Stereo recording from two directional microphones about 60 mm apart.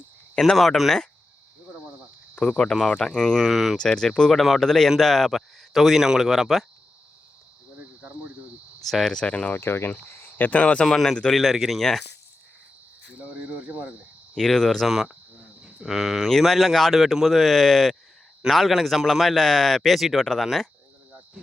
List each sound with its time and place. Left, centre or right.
0.4 s a man's voice: centre
2.3 s speech: centre
3.5 s a man's voice: centre
3.8 s speech: centre
4.4 s a man's voice: centre
7.8 s cricket: right
8.8 s speech: centre
9.2 s speech: left
9.6 s speech: left
10.6 s speech: centre
10.8 s a man's voice: centre
13.1 s cricket: right
14.3 s speech: centre
14.8 s a man's voice: centre